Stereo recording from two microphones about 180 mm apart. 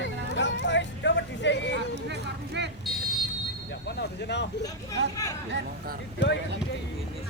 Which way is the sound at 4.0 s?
70° left (ahead or behind).